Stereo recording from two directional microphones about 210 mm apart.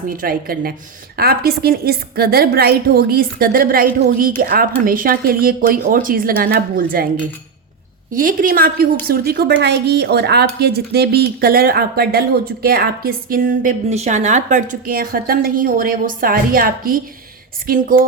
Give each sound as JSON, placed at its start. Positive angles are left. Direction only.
{"t": 0.2, "sound": "a woman's voice", "side_deg": -45}
{"t": 8.1, "sound": "a woman's voice", "side_deg": -40}